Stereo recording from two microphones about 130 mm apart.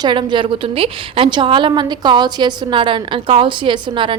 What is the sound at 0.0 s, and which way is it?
A woman's voice, 35° right (ahead or behind).